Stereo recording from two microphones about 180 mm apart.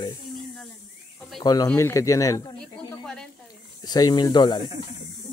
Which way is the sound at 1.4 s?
20° left (ahead or behind).